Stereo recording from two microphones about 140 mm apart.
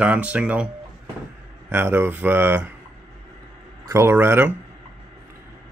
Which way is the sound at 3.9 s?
15° right (ahead or behind).